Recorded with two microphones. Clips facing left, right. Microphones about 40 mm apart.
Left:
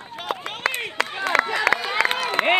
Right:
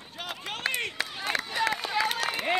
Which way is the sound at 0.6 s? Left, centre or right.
Left.